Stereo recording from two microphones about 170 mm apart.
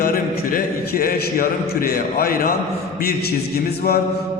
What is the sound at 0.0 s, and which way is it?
A man's voice, 55° left (ahead or behind).